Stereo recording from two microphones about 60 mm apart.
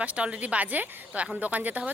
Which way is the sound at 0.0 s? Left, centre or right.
Right.